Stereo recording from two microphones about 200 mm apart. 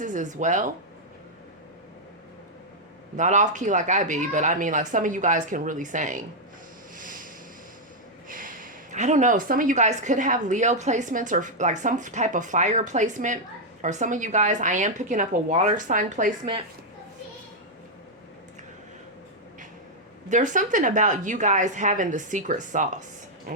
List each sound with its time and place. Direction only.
0.0 s speech: 40° right (ahead or behind)
3.2 s a woman's voice: 35° right (ahead or behind)
6.9 s a sound: 40° right (ahead or behind)
8.3 s a woman's voice: 40° right (ahead or behind)
20.3 s a woman's voice: 40° right (ahead or behind)